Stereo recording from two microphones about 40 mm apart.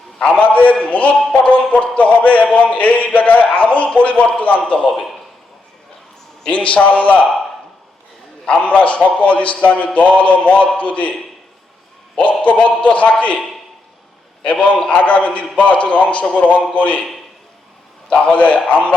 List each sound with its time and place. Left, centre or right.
0.2 s a man's voice: left
6.5 s a man's voice: left
8.4 s a man's voice: left
12.6 s a man's voice: left
14.4 s a man's voice: left
18.1 s a man's voice: left